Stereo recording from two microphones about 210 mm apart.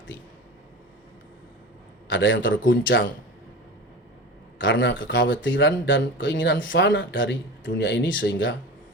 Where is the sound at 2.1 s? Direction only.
65° left (ahead or behind).